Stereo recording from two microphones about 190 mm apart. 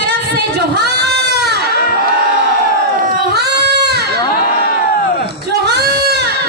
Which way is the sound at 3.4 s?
60° right (ahead or behind).